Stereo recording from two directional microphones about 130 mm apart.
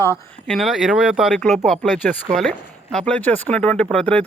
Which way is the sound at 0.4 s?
Centre (ahead or behind).